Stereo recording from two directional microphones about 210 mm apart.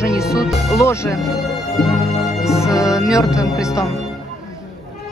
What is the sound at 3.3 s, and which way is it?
Speech, 5° right (ahead or behind).